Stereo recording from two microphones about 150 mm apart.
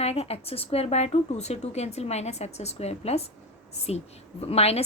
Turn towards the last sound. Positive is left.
turn(degrees=45)  # may be behind; listen again after turning